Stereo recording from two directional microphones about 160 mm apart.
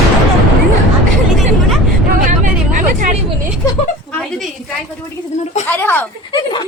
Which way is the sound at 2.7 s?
55° right (ahead or behind).